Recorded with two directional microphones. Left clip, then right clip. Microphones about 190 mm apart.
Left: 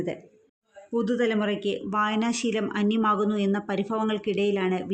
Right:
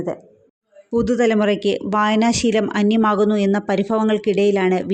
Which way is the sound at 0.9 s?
30° right (ahead or behind).